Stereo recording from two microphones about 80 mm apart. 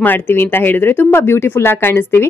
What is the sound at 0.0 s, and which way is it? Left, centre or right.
A woman's voice, left.